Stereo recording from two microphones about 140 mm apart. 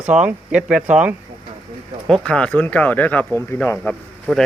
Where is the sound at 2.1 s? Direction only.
5° left (ahead or behind).